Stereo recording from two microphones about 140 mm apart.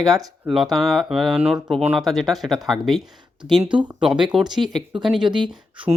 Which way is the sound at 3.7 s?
35° right (ahead or behind).